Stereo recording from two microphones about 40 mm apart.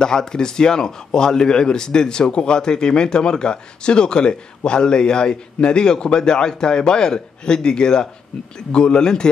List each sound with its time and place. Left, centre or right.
0.0 s speech: centre